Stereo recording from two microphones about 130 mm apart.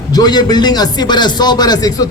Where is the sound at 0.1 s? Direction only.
30° left (ahead or behind).